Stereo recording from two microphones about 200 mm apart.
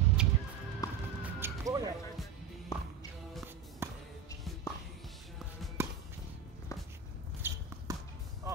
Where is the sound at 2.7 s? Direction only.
15° left (ahead or behind).